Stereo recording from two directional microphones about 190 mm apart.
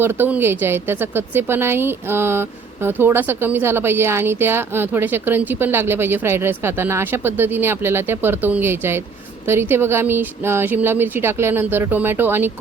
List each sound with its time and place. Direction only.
0.0 s a woman's voice: 10° right (ahead or behind)